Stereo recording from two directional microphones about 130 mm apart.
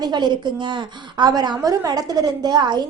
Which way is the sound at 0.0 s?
35° right (ahead or behind).